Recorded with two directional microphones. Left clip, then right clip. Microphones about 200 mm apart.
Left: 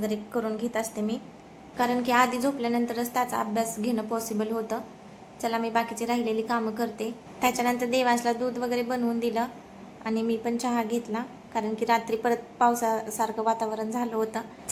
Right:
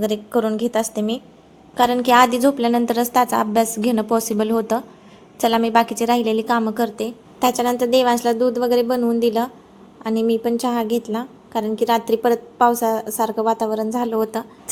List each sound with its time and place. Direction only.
0.0 s a woman's voice: 40° right (ahead or behind)